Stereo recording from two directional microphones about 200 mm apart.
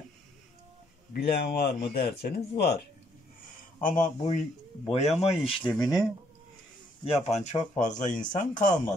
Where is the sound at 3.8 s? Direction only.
40° left (ahead or behind).